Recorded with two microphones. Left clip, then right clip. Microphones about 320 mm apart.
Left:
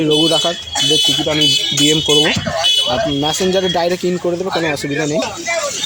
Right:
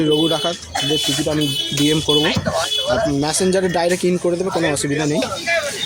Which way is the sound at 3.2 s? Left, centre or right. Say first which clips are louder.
Left 2 dB; right.